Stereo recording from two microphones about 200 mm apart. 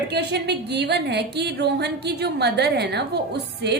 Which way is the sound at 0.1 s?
55° right (ahead or behind).